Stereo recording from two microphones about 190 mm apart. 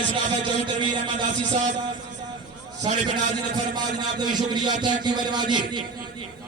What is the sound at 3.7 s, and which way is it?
A man's voice, 20° right (ahead or behind).